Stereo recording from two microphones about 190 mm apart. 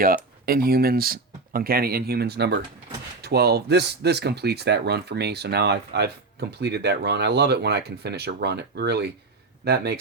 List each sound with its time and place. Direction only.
0.4 s speech: 50° right (ahead or behind)